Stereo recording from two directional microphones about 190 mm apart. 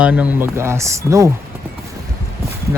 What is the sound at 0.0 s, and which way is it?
Speech, 5° right (ahead or behind).